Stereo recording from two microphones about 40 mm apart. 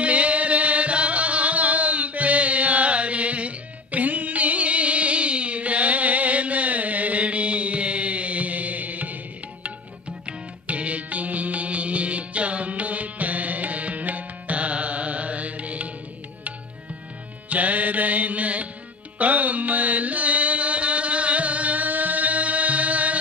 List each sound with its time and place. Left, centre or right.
0.0 s music: right
10.7 s music: right
17.5 s music: right